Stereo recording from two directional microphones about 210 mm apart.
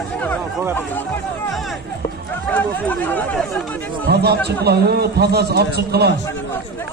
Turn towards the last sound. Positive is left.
turn(degrees=-50)  # may be behind; listen again after turning